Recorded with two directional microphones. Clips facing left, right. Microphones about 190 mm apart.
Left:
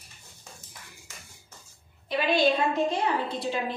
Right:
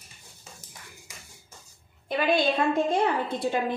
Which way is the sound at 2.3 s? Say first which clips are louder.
Even; 50° right (ahead or behind).